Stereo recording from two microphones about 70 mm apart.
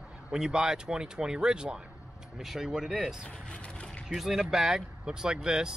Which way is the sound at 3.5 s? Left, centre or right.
Centre.